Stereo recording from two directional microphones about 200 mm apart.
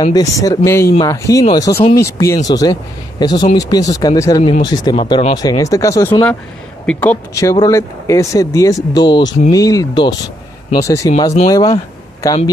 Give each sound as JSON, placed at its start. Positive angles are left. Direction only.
{"t": 0.0, "sound": "speech", "side_deg": 20}